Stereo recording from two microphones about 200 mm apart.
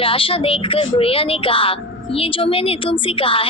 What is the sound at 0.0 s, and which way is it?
A woman's voice, 25° left (ahead or behind).